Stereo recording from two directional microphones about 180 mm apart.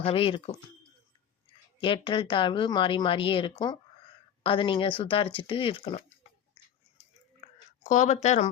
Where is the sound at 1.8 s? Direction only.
25° left (ahead or behind).